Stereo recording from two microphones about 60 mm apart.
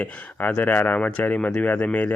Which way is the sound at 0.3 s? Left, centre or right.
Left.